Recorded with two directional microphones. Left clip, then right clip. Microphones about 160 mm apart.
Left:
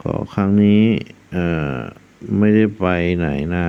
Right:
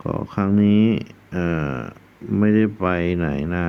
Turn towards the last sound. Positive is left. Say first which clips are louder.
# left 3 dB
turn(degrees=15)  # may be behind; listen again after turning